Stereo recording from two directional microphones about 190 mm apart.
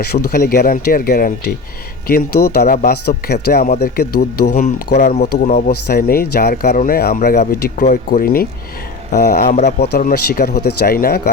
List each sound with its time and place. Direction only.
0.0 s speech: 50° left (ahead or behind)
5.1 s speech: 40° left (ahead or behind)